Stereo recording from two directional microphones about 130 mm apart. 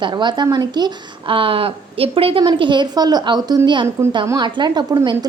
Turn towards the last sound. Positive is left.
turn(degrees=-35)  # may be behind; listen again after turning